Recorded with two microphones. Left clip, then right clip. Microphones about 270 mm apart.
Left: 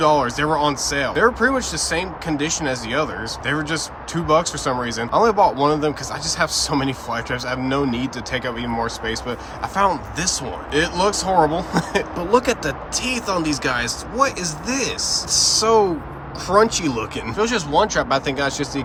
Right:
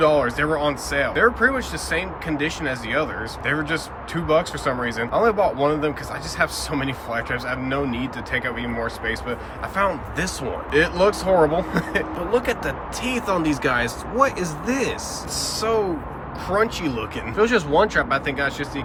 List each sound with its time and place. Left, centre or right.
0.0 s speech: centre